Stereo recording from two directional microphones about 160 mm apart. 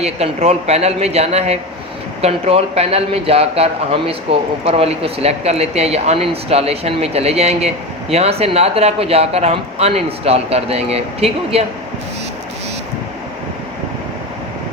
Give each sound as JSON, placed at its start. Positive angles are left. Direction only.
{"t": 0.0, "sound": "a man's voice", "side_deg": -40}